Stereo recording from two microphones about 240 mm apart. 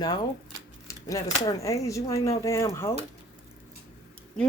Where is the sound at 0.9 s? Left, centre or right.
Centre.